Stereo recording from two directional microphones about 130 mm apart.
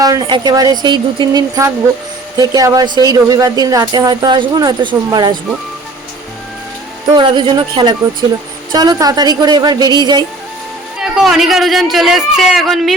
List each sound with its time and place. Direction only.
0.0 s speech: 30° right (ahead or behind)
7.2 s speech: 35° right (ahead or behind)
11.0 s a man's voice: 5° right (ahead or behind)